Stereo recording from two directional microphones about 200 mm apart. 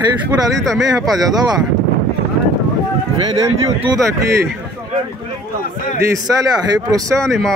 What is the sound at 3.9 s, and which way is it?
Speech, 15° right (ahead or behind).